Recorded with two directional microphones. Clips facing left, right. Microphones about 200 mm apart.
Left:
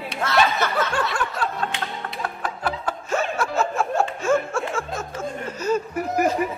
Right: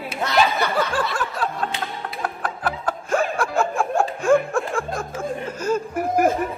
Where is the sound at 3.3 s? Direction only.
15° right (ahead or behind).